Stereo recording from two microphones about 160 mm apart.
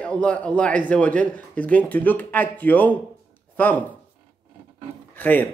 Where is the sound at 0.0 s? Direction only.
10° left (ahead or behind).